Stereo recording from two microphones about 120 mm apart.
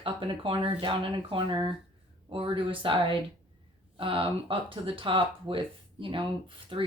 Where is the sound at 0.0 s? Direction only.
45° right (ahead or behind).